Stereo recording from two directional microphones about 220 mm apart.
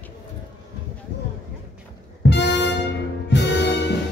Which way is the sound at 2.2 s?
50° left (ahead or behind).